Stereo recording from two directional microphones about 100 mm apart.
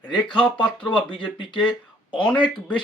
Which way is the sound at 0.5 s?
55° left (ahead or behind).